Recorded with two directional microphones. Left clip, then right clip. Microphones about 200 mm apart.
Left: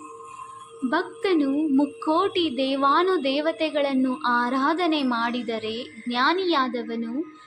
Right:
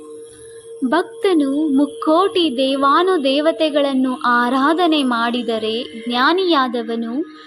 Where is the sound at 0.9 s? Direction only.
30° right (ahead or behind).